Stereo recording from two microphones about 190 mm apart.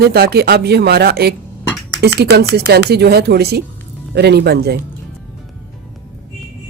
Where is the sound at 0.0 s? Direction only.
55° right (ahead or behind).